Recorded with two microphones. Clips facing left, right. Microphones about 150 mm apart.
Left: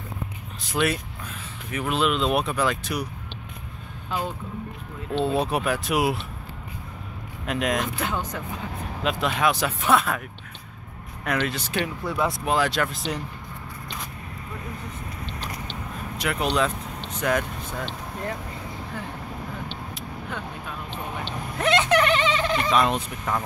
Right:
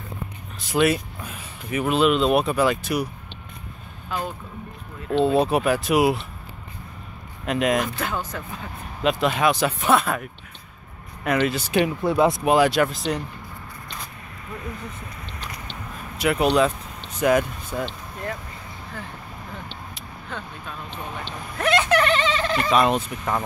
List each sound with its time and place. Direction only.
0.7 s speech: 5° right (ahead or behind)
5.2 s speech: centre (ahead or behind)
7.4 s speech: centre (ahead or behind)
8.0 s speech: 15° left (ahead or behind)
9.0 s speech: centre (ahead or behind)
11.2 s speech: 5° right (ahead or behind)
16.2 s speech: 5° right (ahead or behind)
20.2 s vehicle: 10° left (ahead or behind)
22.7 s speech: 5° right (ahead or behind)